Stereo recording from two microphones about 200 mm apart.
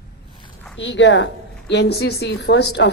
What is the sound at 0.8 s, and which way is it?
A woman's voice, 65° left (ahead or behind).